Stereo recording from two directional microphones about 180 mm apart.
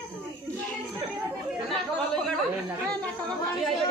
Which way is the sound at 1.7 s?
Centre (ahead or behind).